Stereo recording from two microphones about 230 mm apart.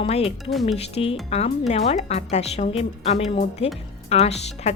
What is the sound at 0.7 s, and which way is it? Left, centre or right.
Speech, left.